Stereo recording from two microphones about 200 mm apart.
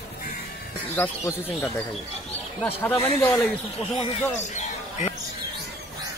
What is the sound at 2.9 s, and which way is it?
Speech, 15° left (ahead or behind).